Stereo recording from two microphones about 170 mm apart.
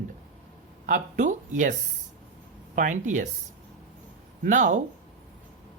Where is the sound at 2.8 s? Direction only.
50° right (ahead or behind).